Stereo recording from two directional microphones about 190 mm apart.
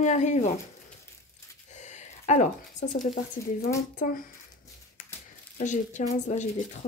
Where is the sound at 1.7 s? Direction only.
40° left (ahead or behind).